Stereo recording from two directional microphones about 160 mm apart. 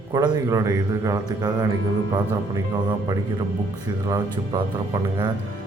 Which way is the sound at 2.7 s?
25° right (ahead or behind).